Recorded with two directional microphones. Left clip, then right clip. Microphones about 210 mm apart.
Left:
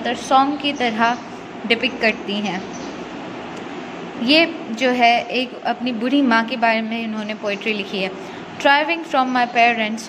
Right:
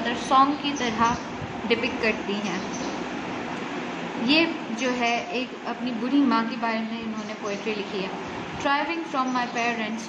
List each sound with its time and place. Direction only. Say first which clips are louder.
0.0 s a woman's voice: left 4 dB; 25° left (ahead or behind)
4.3 s a woman's voice: left 7 dB; 30° left (ahead or behind)